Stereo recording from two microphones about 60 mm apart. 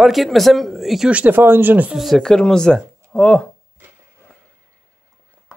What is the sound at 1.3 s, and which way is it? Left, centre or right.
Speech, right.